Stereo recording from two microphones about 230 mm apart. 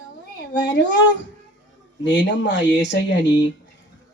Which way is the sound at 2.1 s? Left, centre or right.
Left.